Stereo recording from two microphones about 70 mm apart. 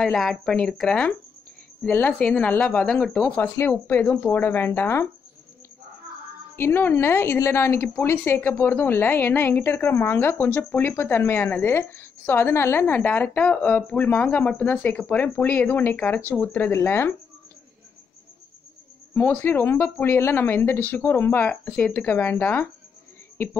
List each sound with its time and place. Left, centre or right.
0.0 s speech: centre
1.9 s speech: left
2.1 s a woman's voice: centre
3.8 s speech: left
6.5 s a woman's voice: left
19.4 s a woman's voice: left